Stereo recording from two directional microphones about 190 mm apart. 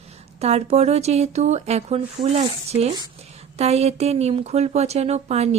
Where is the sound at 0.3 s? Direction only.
35° right (ahead or behind).